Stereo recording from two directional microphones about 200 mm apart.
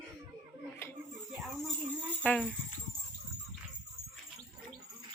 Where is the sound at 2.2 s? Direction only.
5° left (ahead or behind).